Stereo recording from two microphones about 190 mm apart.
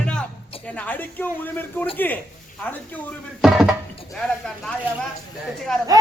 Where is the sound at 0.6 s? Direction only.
10° left (ahead or behind).